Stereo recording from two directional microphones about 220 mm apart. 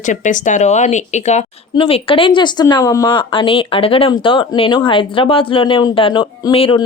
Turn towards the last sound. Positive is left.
turn(degrees=25)  # may be behind; listen again after turning